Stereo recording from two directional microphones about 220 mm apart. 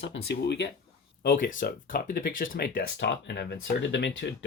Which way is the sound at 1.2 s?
40° left (ahead or behind).